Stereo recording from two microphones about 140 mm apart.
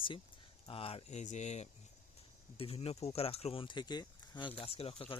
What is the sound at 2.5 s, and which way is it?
Speech, 45° left (ahead or behind).